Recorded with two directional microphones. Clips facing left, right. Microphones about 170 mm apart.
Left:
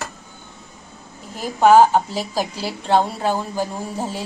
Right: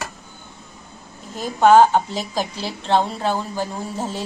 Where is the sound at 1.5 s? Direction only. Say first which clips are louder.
Even; 5° left (ahead or behind).